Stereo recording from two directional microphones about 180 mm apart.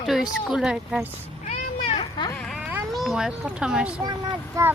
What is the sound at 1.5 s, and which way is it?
Cat, 35° left (ahead or behind).